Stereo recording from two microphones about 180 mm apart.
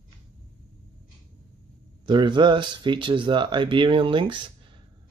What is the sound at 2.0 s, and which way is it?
Speech, 25° right (ahead or behind).